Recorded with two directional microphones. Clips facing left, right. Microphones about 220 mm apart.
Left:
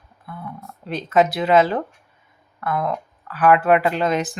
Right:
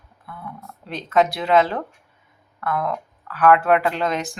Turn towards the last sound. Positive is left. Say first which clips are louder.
# left 3 dB
turn(degrees=5)  # may be behind; listen again after turning